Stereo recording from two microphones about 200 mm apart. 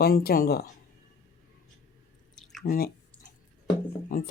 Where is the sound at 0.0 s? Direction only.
50° left (ahead or behind).